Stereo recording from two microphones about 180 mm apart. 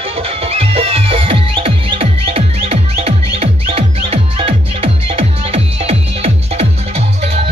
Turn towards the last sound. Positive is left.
turn(degrees=-35)  # may be behind; listen again after turning